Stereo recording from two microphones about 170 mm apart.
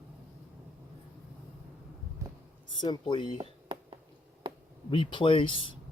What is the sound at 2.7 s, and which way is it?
Speech, 25° left (ahead or behind).